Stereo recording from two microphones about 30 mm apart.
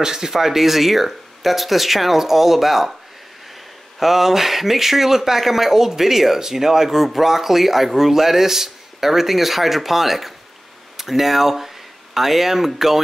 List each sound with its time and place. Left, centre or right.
0.0 s speech: centre
4.0 s speech: centre